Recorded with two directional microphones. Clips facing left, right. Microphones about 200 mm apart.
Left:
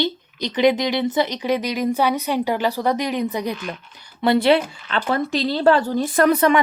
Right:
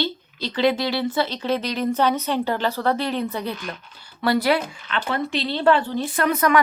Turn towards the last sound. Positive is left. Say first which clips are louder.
# left 3 dB
turn(degrees=30)  # may be behind; listen again after turning